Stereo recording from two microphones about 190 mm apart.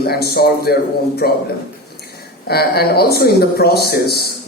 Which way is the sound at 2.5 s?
55° left (ahead or behind).